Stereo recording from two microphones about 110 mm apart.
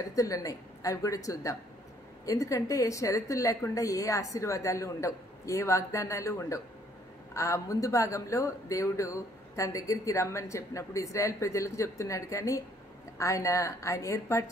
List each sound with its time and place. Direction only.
0.1 s speech: 30° left (ahead or behind)